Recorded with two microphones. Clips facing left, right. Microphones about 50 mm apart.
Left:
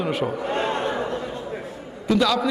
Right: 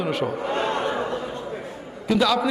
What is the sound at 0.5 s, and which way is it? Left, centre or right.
Speech, left.